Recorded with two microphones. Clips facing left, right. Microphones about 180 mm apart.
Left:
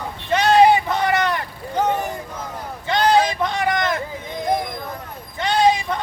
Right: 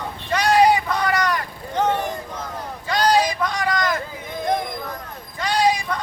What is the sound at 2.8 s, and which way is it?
Vehicle, 25° left (ahead or behind).